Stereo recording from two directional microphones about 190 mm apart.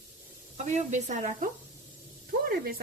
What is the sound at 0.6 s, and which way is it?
Speech, 40° right (ahead or behind).